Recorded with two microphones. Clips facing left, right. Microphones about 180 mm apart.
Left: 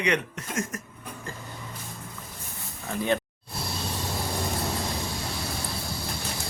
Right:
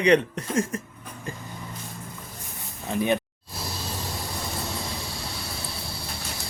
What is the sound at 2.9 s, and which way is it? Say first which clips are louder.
Speech: right 2 dB; 15° right (ahead or behind).